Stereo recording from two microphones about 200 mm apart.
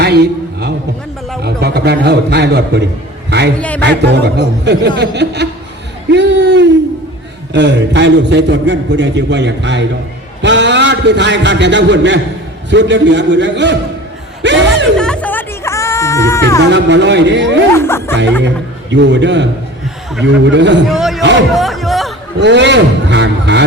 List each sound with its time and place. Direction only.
0.0 s a sound: 55° right (ahead or behind)
1.4 s a man's voice: 55° right (ahead or behind)
14.9 s chatter: 5° left (ahead or behind)
16.7 s a man's voice: 60° right (ahead or behind)
17.7 s music: 15° left (ahead or behind)
18.4 s a man's voice: 60° right (ahead or behind)
20.9 s a sound: centre (ahead or behind)
21.2 s a sound: 65° right (ahead or behind)
21.5 s music: centre (ahead or behind)
22.4 s a man's voice: 60° right (ahead or behind)